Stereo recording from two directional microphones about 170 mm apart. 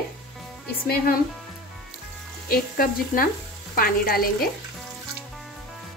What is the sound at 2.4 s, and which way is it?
A woman's voice, 60° left (ahead or behind).